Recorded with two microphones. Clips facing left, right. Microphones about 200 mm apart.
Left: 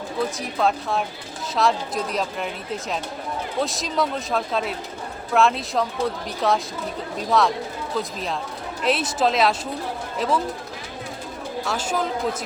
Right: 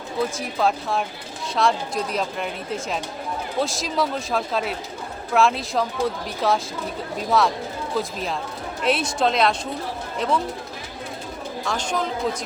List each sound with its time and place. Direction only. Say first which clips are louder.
0.3 s speech: even; centre (ahead or behind)
11.6 s speech: even; 5° left (ahead or behind)